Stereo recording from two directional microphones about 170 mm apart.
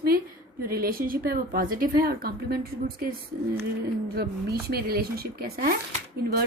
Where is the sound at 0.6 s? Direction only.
60° right (ahead or behind).